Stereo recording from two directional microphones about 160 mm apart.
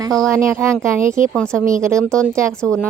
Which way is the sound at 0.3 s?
15° right (ahead or behind).